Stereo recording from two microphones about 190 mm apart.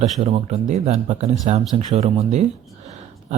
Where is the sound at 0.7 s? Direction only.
40° right (ahead or behind).